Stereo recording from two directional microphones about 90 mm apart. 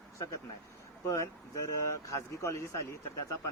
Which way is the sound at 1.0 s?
35° left (ahead or behind).